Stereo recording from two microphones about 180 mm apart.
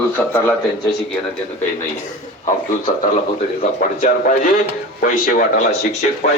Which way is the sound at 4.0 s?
45° left (ahead or behind).